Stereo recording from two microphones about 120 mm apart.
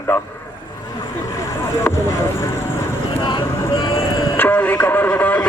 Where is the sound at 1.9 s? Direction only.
20° left (ahead or behind).